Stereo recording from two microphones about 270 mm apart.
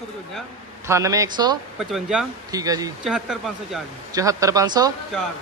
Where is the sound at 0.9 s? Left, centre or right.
Centre.